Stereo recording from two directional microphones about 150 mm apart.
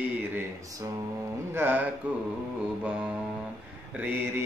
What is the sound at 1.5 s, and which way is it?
Speech, 15° right (ahead or behind).